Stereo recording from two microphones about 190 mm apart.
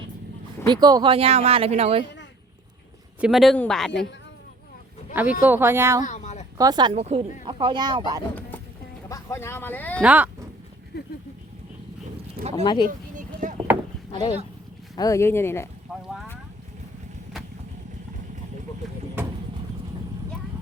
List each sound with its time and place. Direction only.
0.7 s speech: 20° right (ahead or behind)
3.2 s speech: centre (ahead or behind)
5.1 s speech: 10° right (ahead or behind)
6.1 s a sound: 40° left (ahead or behind)
6.6 s speech: 20° right (ahead or behind)
6.9 s speech: 35° right (ahead or behind)
8.4 s music: 10° left (ahead or behind)
9.0 s speech: 15° left (ahead or behind)
10.0 s speech: 5° right (ahead or behind)
12.4 s speech: 35° right (ahead or behind)
12.6 s speech: 25° left (ahead or behind)
13.1 s a sound: 40° right (ahead or behind)
14.1 s speech: 25° left (ahead or behind)
15.9 s boat: 5° right (ahead or behind)